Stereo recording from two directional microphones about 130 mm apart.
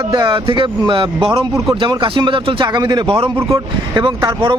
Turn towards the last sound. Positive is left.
turn(degrees=-35)  # may be behind; listen again after turning